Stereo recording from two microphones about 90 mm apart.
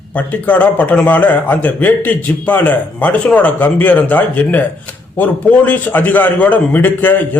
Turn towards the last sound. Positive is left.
turn(degrees=20)  # may be behind; listen again after turning